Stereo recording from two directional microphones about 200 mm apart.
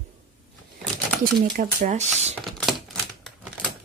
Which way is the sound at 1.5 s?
35° right (ahead or behind).